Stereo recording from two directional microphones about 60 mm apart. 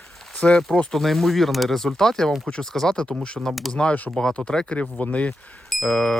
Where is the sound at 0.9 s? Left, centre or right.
Centre; by 5.3 s left.